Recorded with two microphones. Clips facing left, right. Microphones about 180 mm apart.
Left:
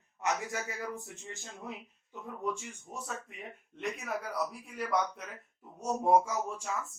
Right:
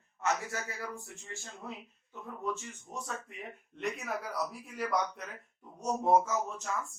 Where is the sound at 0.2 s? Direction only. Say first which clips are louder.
Even; 15° left (ahead or behind).